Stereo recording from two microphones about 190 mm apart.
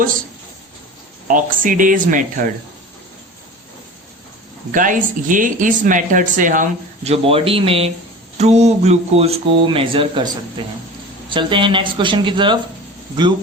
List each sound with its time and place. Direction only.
1.3 s speech: 45° right (ahead or behind)
4.7 s speech: 45° right (ahead or behind); by 12.5 s 25° right (ahead or behind)